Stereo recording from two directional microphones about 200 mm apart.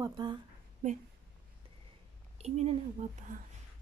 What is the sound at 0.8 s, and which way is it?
Speech, 35° right (ahead or behind).